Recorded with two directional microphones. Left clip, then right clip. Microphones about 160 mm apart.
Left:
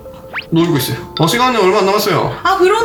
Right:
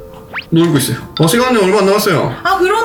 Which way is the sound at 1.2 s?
Centre (ahead or behind).